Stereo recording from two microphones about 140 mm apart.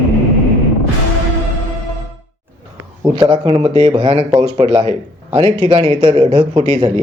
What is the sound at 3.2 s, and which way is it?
Speech, 30° right (ahead or behind).